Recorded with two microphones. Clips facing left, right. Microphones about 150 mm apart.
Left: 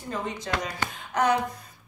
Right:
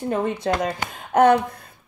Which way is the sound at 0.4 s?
55° right (ahead or behind).